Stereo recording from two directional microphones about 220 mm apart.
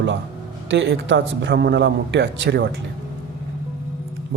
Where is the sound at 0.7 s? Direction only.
55° right (ahead or behind).